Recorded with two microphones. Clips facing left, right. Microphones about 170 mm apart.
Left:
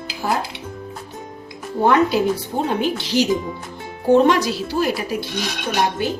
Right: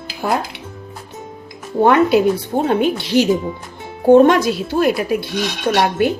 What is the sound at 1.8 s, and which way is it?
Speech, 60° right (ahead or behind).